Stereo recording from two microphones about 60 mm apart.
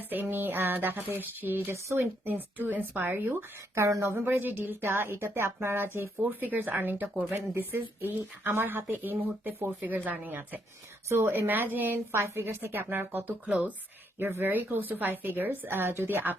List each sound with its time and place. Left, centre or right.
0.0 s speech: right
1.7 s speech: right
2.2 s speech: right
3.8 s speech: right
4.3 s speech: right
11.1 s speech: right
12.1 s speech: right
12.5 s speech: right
14.2 s speech: right